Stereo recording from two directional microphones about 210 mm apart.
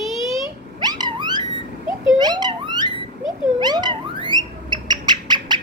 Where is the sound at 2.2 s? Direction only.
20° right (ahead or behind).